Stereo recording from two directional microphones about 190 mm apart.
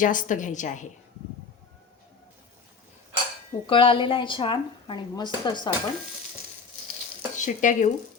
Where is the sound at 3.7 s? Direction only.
25° left (ahead or behind).